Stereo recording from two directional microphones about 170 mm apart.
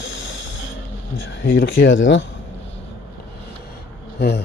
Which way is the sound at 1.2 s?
90° left.